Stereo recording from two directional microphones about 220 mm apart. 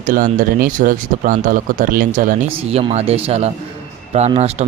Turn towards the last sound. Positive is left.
turn(degrees=-30)  # may be behind; listen again after turning